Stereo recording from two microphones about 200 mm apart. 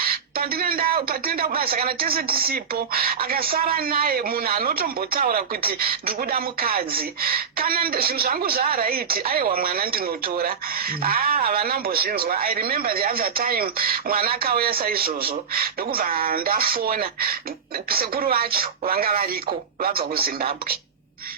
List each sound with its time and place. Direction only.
0.0 s speech: 50° right (ahead or behind)